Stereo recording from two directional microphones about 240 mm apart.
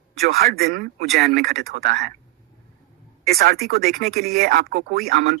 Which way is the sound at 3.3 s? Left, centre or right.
Right.